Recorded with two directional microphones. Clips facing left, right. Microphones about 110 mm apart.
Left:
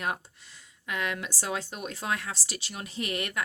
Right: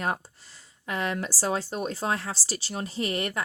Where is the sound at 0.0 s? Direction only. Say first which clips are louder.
Right 3 dB; 35° right (ahead or behind).